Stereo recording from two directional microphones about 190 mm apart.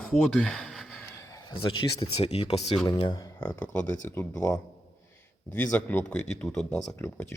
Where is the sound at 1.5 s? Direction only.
20° left (ahead or behind).